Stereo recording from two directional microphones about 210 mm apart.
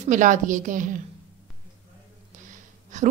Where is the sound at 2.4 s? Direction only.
35° right (ahead or behind).